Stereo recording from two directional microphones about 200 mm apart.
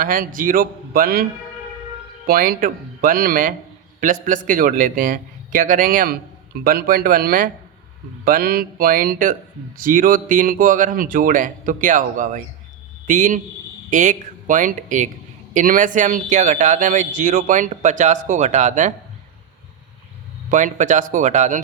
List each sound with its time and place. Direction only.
0.0 s speech: 45° right (ahead or behind)
20.5 s speech: 40° right (ahead or behind)